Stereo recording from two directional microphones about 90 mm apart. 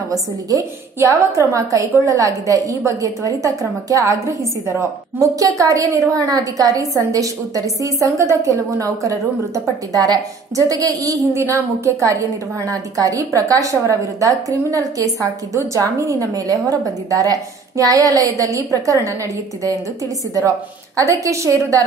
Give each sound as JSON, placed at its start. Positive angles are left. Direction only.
{"t": 0.1, "sound": "a woman's voice", "side_deg": -40}
{"t": 20.3, "sound": "a woman's voice", "side_deg": -35}